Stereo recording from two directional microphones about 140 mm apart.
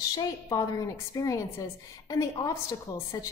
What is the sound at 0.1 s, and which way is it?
A woman's voice, 25° left (ahead or behind).